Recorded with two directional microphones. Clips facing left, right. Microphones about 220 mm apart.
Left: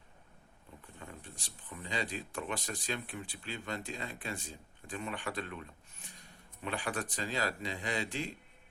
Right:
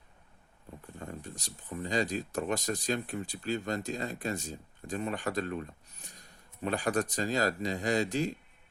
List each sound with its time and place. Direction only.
0.9 s speech: 40° right (ahead or behind)